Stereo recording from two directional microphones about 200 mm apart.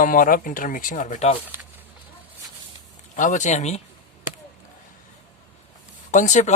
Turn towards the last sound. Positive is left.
turn(degrees=35)  # may be behind; listen again after turning